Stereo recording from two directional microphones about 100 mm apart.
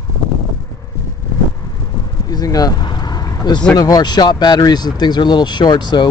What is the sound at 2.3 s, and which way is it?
Vehicle, 40° left (ahead or behind).